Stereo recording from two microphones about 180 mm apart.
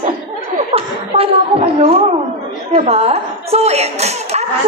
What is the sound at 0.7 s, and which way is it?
Chuckle, 35° right (ahead or behind).